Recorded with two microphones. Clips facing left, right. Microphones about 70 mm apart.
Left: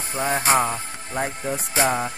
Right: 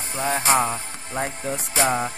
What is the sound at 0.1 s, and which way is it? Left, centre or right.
Speech, left.